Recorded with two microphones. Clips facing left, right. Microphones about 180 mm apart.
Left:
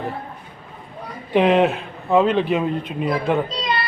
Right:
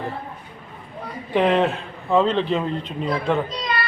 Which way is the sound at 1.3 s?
15° left (ahead or behind).